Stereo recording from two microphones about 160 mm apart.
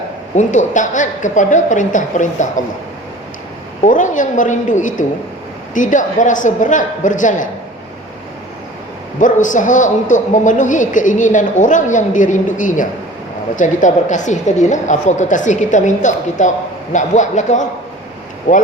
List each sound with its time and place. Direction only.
0.3 s a woman's voice: 50° left (ahead or behind)
3.8 s a woman's voice: 55° left (ahead or behind)
9.2 s a woman's voice: 50° left (ahead or behind)